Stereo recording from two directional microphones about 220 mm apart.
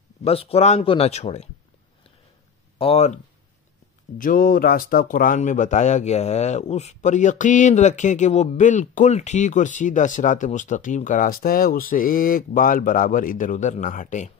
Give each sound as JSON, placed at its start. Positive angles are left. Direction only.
{"t": 0.2, "sound": "speech", "side_deg": 25}
{"t": 2.8, "sound": "speech", "side_deg": 30}
{"t": 4.2, "sound": "speech", "side_deg": 40}